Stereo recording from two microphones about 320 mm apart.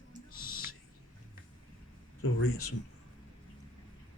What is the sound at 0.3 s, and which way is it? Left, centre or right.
Owl, left.